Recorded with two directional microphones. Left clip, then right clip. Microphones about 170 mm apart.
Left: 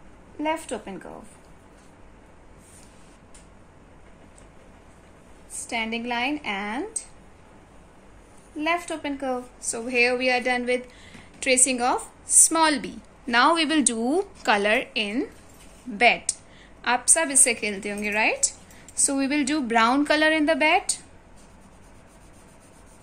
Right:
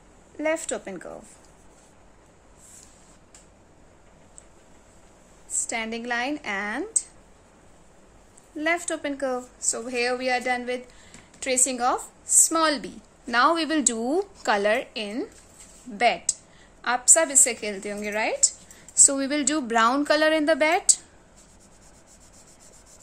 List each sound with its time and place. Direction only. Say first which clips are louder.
0.4 s a woman's voice: right 1 dB; 55° right (ahead or behind)
5.5 s a woman's voice: left 1 dB; 50° right (ahead or behind)
8.5 s a woman's voice: even; 50° right (ahead or behind); by 18.5 s 35° right (ahead or behind)
18.9 s a woman's voice: right 2 dB; 45° right (ahead or behind)